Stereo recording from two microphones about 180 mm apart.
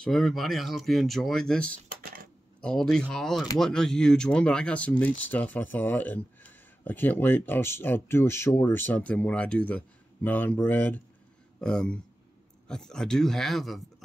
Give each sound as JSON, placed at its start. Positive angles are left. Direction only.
{"t": 0.0, "sound": "speech", "side_deg": 0}
{"t": 1.9, "sound": "computer keyboard", "side_deg": -55}
{"t": 2.6, "sound": "speech", "side_deg": 5}